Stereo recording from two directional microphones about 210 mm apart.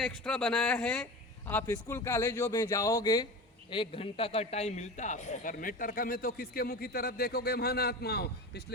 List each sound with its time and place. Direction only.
0.0 s a man's voice: 5° left (ahead or behind); by 8.6 s 50° left (ahead or behind)